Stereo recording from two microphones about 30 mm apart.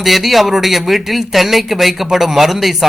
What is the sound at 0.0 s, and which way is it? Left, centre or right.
Speech, centre.